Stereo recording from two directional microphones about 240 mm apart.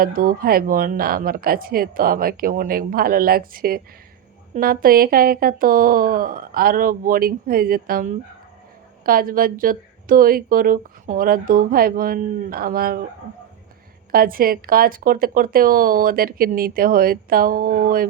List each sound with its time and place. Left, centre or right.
0.0 s a woman's voice: right
14.1 s a woman's voice: right